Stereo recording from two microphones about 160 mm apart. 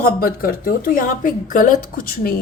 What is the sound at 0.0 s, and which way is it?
A woman's voice, 65° left (ahead or behind).